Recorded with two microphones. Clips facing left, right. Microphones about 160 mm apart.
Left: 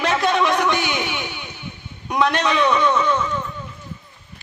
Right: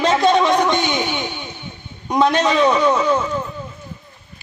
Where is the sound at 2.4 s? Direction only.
35° right (ahead or behind).